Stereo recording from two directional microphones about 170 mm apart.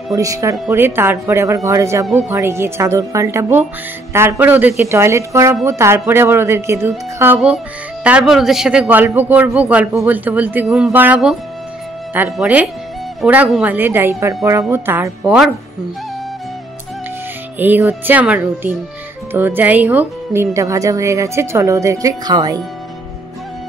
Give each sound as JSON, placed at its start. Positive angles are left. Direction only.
{"t": 0.1, "sound": "a woman's voice", "side_deg": -20}
{"t": 7.3, "sound": "a woman's voice", "side_deg": -5}
{"t": 17.6, "sound": "a woman's voice", "side_deg": -10}